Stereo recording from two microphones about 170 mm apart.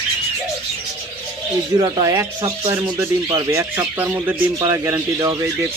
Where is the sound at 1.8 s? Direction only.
25° right (ahead or behind).